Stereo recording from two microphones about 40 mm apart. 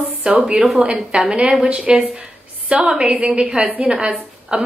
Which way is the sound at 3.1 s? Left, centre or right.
Right.